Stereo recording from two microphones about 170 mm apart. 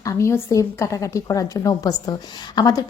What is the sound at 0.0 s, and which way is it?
A woman's voice, 15° left (ahead or behind).